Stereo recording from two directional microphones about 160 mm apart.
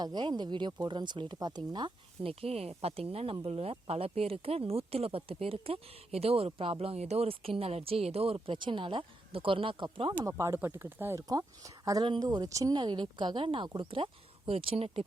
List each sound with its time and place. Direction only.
0.0 s speech: 30° right (ahead or behind)
10.2 s speech: 15° right (ahead or behind); by 15.0 s 35° right (ahead or behind)